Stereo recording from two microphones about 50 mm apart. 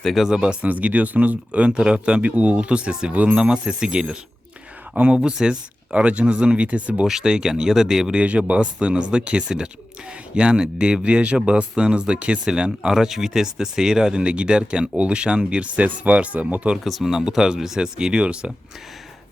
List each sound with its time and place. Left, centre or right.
0.0 s speech: centre
0.3 s speech: centre
0.6 s speech: right
3.3 s speech: centre
5.9 s speech: right
7.1 s speech: centre
8.2 s speech: right
16.7 s speech: centre